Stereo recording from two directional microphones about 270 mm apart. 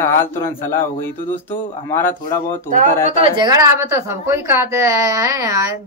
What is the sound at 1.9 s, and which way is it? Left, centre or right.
Speech, centre.